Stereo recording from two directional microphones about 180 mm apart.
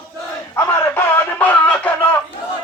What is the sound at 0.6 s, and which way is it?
Music, 10° left (ahead or behind).